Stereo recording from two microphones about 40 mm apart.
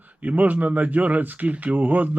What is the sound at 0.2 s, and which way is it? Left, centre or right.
Speech, right.